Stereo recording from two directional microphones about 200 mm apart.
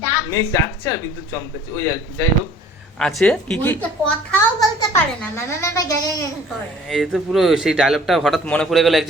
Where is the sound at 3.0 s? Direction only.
Centre (ahead or behind).